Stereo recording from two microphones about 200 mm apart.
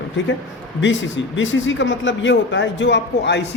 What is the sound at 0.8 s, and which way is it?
A man's voice, 70° left (ahead or behind).